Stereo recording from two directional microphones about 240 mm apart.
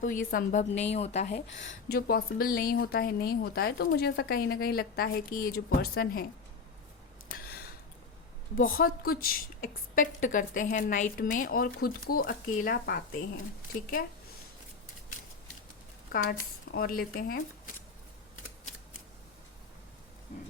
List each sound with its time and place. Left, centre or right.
0.0 s a woman's voice: left
7.3 s a sound: left
8.5 s a woman's voice: left
16.3 s a woman's voice: left